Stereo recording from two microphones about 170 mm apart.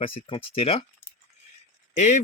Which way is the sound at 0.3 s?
35° left (ahead or behind).